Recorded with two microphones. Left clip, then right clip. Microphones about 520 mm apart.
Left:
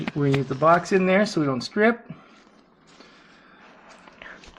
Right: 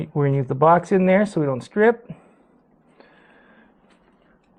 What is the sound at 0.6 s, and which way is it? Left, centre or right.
Speech, right.